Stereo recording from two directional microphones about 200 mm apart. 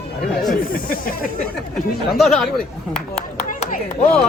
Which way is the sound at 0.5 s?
45° left (ahead or behind).